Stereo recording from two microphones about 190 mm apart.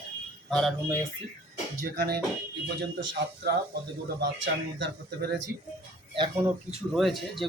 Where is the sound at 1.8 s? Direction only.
55° right (ahead or behind).